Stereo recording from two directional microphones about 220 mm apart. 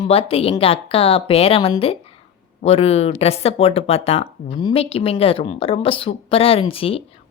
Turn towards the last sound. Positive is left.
turn(degrees=25)  # may be behind; listen again after turning